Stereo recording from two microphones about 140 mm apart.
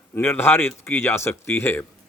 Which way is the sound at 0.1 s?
15° left (ahead or behind).